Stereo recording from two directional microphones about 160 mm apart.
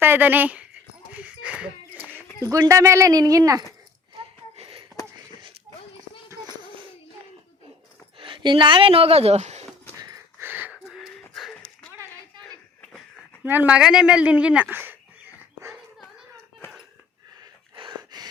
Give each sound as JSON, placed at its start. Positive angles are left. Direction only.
{"t": 0.0, "sound": "speech", "side_deg": -10}
{"t": 1.2, "sound": "a sound", "side_deg": -5}
{"t": 2.5, "sound": "speech", "side_deg": -20}
{"t": 4.5, "sound": "wheeze", "side_deg": -35}
{"t": 8.2, "sound": "speech", "side_deg": -30}
{"t": 10.4, "sound": "wheeze", "side_deg": -10}
{"t": 10.8, "sound": "a sound", "side_deg": 0}
{"t": 13.4, "sound": "speech", "side_deg": -10}
{"t": 17.7, "sound": "a sound", "side_deg": -25}